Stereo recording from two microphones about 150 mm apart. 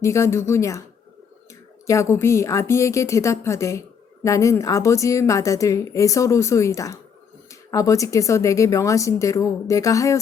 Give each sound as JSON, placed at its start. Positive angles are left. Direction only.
{"t": 0.0, "sound": "a woman's voice", "side_deg": 20}
{"t": 1.9, "sound": "a woman's voice", "side_deg": 20}